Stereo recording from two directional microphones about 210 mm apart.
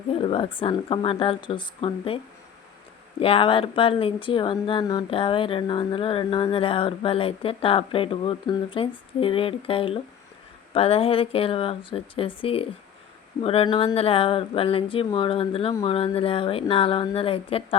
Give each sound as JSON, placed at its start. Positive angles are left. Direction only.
{"t": 0.1, "sound": "speech", "side_deg": 25}
{"t": 3.2, "sound": "speech", "side_deg": 25}